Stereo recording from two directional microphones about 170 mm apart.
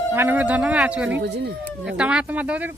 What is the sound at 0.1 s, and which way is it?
Speech, 10° right (ahead or behind).